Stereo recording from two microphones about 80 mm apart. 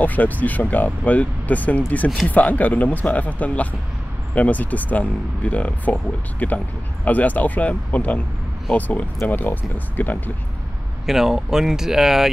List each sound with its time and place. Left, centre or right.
0.0 s speech: left
11.1 s speech: centre